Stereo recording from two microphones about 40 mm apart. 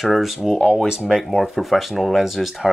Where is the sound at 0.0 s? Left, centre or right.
Centre.